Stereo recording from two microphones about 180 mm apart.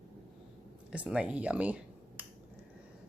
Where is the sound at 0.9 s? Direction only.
5° right (ahead or behind).